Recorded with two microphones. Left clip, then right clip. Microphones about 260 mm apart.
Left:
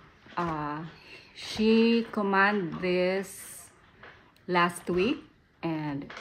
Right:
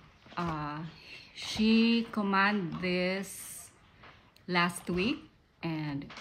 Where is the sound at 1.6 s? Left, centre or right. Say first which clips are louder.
Left 5 dB; centre.